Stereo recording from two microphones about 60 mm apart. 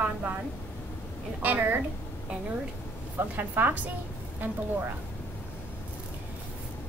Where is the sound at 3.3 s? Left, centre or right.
Right.